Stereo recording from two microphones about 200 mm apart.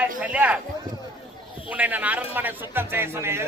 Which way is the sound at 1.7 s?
5° right (ahead or behind).